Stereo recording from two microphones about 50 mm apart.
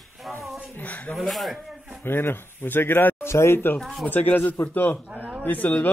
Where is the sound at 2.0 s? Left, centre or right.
Left.